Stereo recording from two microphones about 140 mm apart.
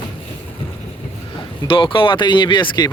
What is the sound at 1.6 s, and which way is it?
Speech, 40° left (ahead or behind).